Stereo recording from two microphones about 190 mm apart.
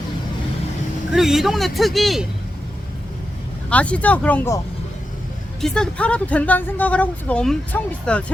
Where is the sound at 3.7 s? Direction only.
5° left (ahead or behind).